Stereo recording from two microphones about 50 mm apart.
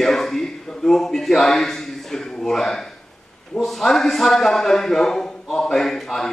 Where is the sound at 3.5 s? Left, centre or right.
Centre.